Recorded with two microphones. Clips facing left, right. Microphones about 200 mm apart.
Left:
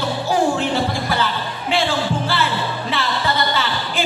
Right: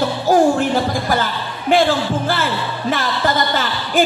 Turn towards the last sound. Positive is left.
turn(degrees=-45)  # may be behind; listen again after turning